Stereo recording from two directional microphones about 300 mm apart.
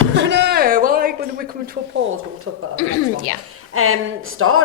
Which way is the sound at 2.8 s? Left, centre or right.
Left.